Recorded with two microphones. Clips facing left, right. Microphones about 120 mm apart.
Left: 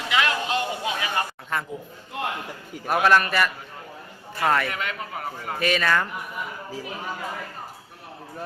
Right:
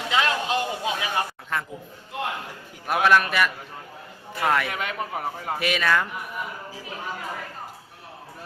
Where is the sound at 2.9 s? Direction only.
Centre (ahead or behind).